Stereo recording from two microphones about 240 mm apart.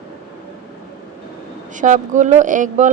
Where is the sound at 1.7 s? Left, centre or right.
Right.